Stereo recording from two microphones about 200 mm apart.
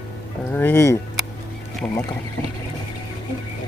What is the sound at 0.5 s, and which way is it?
Speech, 10° left (ahead or behind).